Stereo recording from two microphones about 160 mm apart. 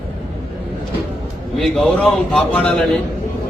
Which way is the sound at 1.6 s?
5° left (ahead or behind).